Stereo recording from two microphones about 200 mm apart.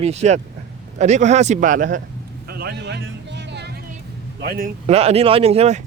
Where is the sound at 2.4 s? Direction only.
50° right (ahead or behind).